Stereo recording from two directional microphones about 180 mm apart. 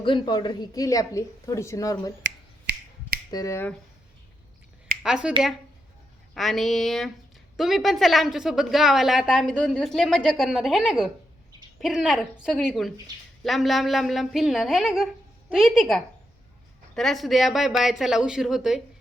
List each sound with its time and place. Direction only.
0.0 s a woman's voice: 25° left (ahead or behind)
2.2 s finger snapping: 70° right (ahead or behind)
3.3 s speech: 15° left (ahead or behind)
5.0 s speech: 5° right (ahead or behind)
6.3 s speech: centre (ahead or behind)